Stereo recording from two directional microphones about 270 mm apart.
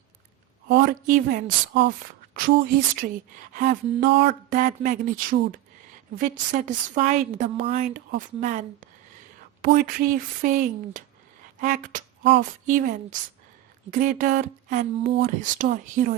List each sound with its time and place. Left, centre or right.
0.7 s a woman's voice: right